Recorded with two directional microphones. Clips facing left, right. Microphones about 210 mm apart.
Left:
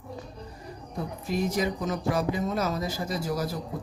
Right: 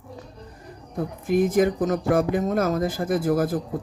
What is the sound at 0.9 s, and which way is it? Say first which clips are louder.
Speech: right 8 dB; 55° right (ahead or behind).